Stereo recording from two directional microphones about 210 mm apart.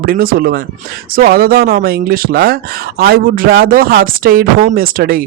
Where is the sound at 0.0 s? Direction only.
45° right (ahead or behind).